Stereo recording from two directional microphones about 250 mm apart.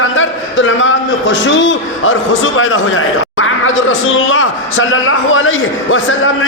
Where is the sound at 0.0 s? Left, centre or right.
Left.